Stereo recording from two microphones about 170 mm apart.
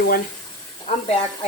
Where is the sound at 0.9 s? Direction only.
40° left (ahead or behind).